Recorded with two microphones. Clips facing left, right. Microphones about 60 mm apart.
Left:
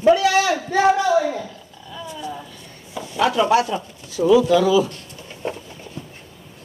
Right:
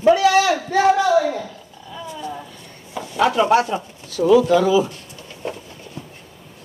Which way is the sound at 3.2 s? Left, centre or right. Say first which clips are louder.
Right 1 dB; right.